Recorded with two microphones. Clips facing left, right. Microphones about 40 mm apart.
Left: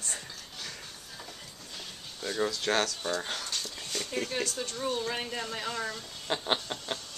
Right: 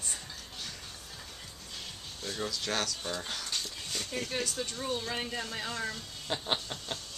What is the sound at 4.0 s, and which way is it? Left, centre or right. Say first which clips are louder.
Speech: left 3 dB; centre.